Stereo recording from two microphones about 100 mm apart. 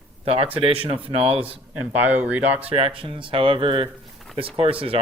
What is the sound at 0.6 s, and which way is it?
Speech, 65° right (ahead or behind).